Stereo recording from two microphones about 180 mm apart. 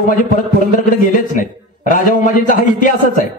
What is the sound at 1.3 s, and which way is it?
A man's voice, 45° left (ahead or behind).